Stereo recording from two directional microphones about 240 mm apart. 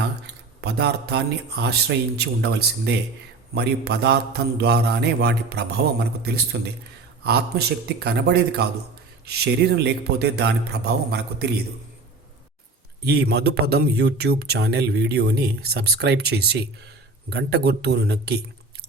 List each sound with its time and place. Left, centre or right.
0.6 s speech: right
13.1 s speech: right